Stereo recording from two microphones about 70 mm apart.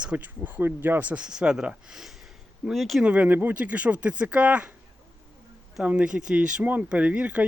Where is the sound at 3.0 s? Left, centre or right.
Centre.